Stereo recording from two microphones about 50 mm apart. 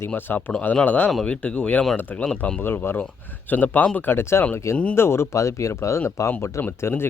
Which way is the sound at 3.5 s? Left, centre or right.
Left.